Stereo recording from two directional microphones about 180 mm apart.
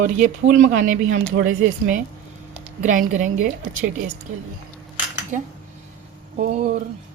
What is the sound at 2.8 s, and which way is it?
Speech, 45° right (ahead or behind).